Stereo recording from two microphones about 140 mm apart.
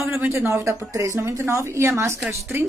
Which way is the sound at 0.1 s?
15° right (ahead or behind).